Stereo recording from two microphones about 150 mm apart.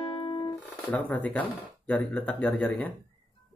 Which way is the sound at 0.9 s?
10° left (ahead or behind).